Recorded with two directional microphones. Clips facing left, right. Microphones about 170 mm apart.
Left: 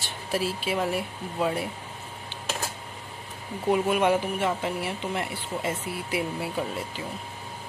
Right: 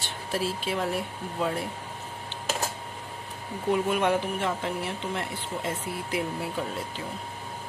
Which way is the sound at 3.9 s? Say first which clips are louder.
Left 2 dB; 10° left (ahead or behind).